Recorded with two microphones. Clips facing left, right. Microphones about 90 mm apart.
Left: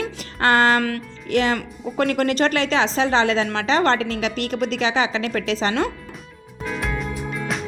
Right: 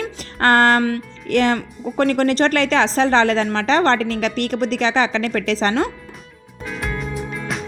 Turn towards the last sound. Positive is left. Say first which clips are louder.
# even
turn(degrees=0)  # may be behind; listen again after turning